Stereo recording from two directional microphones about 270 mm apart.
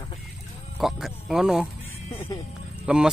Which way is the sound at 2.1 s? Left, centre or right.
Centre.